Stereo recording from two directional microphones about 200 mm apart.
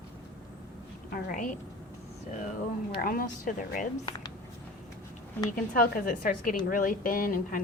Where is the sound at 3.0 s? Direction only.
45° left (ahead or behind).